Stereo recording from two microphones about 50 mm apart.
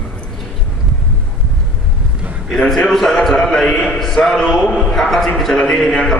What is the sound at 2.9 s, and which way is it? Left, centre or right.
A man's voice, centre.